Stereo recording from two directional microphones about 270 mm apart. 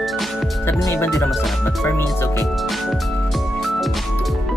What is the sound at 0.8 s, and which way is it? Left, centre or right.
Speech, centre.